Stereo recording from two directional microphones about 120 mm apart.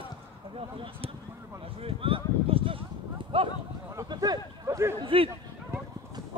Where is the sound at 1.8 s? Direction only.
50° right (ahead or behind).